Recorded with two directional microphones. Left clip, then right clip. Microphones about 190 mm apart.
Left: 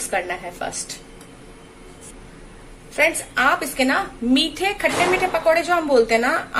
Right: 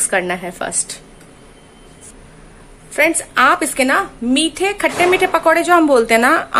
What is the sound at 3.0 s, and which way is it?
A woman's voice, 35° right (ahead or behind).